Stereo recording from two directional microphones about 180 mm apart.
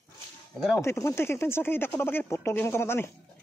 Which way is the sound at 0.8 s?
15° left (ahead or behind).